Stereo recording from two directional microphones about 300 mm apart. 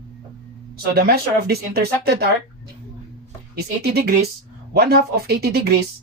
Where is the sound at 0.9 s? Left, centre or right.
Right.